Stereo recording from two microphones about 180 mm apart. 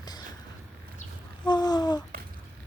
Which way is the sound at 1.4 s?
20° left (ahead or behind).